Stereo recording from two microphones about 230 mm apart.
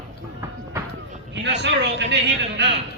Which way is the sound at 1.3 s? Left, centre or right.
Right.